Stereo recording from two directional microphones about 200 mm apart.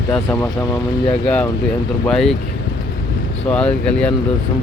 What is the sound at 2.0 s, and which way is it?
Speech, centre (ahead or behind).